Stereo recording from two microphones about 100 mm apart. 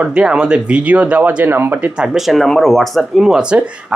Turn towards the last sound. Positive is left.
turn(degrees=-10)  # may be behind; listen again after turning